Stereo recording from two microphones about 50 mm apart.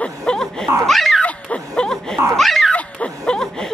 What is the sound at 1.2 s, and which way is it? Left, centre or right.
Laughter, left.